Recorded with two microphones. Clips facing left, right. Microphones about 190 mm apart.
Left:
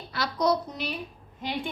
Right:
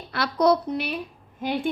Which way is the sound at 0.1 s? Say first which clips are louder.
Right 5 dB; 60° right (ahead or behind).